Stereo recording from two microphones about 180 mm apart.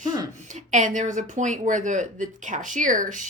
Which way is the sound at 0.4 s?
40° right (ahead or behind).